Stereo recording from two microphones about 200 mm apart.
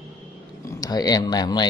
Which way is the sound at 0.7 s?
15° left (ahead or behind).